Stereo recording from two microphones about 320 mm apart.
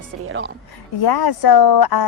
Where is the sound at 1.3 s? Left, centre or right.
Left.